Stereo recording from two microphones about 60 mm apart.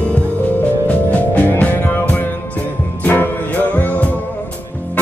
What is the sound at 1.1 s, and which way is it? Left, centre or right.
Music, left.